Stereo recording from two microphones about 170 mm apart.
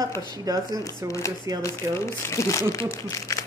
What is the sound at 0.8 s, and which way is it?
Speech, 20° left (ahead or behind).